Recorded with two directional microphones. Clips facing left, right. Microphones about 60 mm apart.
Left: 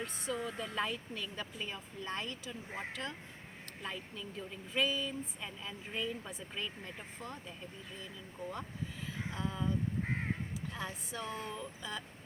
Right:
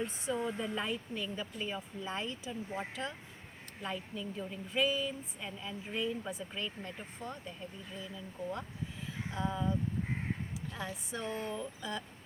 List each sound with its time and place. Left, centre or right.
0.0 s a woman's voice: right
0.8 s a woman's voice: centre
9.3 s a woman's voice: centre
10.8 s a woman's voice: centre